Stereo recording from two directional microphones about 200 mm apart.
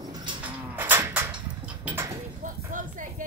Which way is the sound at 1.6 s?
10° right (ahead or behind).